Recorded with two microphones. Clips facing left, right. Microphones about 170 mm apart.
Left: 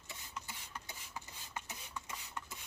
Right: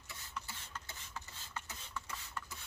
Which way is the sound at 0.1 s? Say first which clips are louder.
Right 1 dB; 15° left (ahead or behind).